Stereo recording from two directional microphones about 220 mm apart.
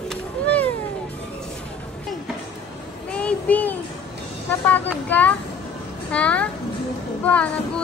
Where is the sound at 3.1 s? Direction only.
5° left (ahead or behind).